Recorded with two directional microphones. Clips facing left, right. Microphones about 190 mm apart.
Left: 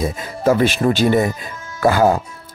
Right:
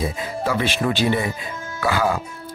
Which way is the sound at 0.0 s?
45° left (ahead or behind).